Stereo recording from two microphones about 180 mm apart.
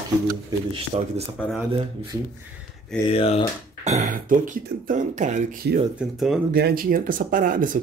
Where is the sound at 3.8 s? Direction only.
40° right (ahead or behind).